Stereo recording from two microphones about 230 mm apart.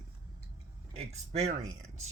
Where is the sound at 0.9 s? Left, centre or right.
Right.